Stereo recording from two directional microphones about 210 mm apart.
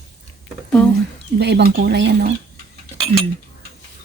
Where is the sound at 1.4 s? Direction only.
50° right (ahead or behind).